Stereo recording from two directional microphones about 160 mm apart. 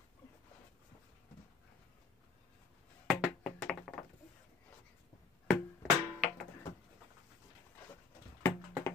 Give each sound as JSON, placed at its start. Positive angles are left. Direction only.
{"t": 3.1, "sound": "tap", "side_deg": 5}
{"t": 5.5, "sound": "music", "side_deg": 0}
{"t": 8.4, "sound": "a sound", "side_deg": 15}